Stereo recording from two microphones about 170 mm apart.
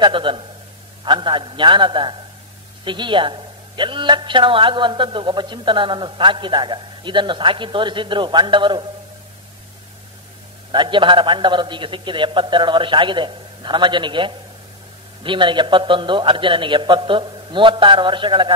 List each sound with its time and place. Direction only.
0.0 s a man's voice: 30° right (ahead or behind)
10.7 s a man's voice: 30° right (ahead or behind)